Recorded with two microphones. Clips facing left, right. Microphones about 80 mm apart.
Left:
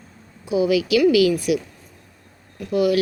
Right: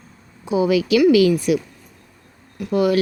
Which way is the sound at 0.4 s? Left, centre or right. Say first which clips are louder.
Right 1 dB; right.